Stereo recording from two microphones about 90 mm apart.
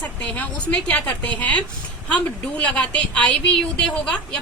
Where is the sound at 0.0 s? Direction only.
15° left (ahead or behind).